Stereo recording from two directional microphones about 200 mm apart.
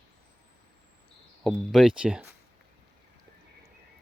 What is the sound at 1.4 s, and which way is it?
Speech, centre (ahead or behind).